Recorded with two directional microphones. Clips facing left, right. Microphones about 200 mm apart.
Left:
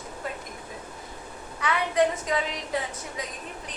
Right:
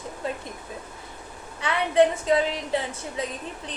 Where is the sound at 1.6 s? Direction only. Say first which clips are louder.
Right 4 dB; 30° right (ahead or behind).